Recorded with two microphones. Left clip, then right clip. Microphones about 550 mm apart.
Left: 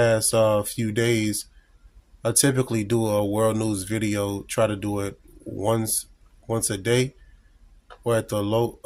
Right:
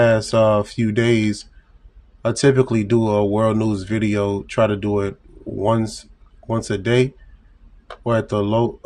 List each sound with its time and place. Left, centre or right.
0.0 s speech: left